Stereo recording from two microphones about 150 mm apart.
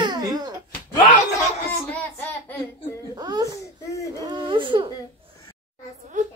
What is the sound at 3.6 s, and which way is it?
Baby cry, 20° left (ahead or behind).